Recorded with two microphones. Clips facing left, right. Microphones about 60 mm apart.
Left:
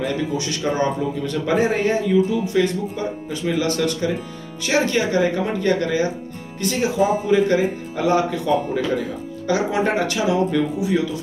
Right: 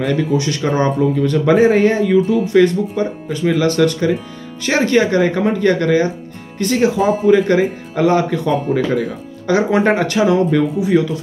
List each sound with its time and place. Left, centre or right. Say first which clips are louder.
0.0 s speech: right 6 dB; right
6.6 s speech: right 5 dB; right
9.5 s speech: right 6 dB; right